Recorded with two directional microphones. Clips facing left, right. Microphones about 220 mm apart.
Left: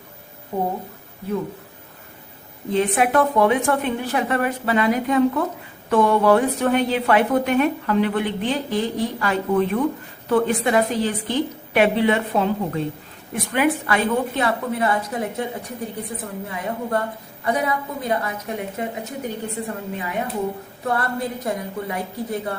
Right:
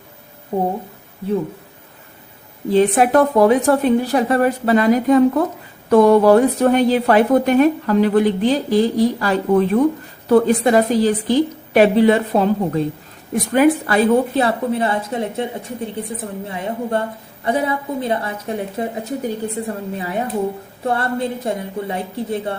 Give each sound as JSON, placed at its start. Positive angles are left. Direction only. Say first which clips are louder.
{"t": 0.5, "sound": "a woman's voice", "louder": "right 4 dB", "side_deg": -30}
{"t": 2.6, "sound": "a woman's voice", "louder": "right 6 dB", "side_deg": -35}